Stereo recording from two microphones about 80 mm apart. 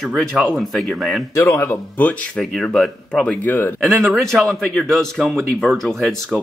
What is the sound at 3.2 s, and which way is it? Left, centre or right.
Speech, centre.